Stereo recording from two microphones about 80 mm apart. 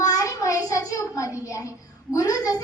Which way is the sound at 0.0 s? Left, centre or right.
Left.